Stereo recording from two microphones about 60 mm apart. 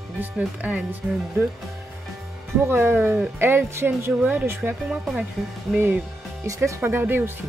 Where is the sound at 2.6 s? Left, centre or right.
Right.